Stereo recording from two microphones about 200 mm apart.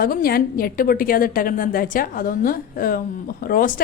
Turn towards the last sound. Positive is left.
turn(degrees=45)  # may be behind; listen again after turning